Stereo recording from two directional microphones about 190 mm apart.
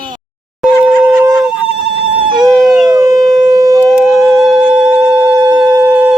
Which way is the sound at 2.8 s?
20° right (ahead or behind).